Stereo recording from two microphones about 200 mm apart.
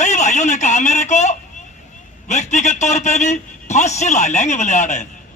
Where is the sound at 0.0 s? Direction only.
35° left (ahead or behind).